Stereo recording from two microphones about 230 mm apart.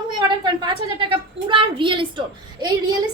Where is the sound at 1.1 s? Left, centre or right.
Right.